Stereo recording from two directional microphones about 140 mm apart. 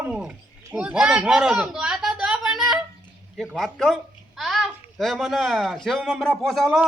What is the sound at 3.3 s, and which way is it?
Speech, 5° left (ahead or behind).